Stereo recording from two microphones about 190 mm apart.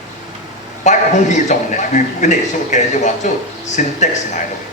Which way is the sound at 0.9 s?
35° left (ahead or behind).